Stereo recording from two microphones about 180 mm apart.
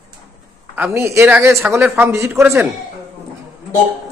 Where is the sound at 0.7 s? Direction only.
10° right (ahead or behind).